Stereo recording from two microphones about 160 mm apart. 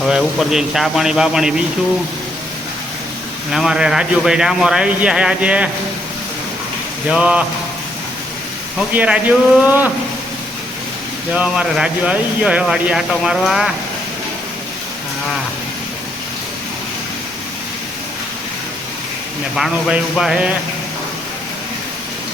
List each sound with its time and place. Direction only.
0.0 s speech: centre (ahead or behind)
3.5 s speech: 5° right (ahead or behind)
7.1 s speech: 5° right (ahead or behind)
8.9 s speech: 10° right (ahead or behind)
11.3 s speech: 5° right (ahead or behind)
19.5 s speech: centre (ahead or behind)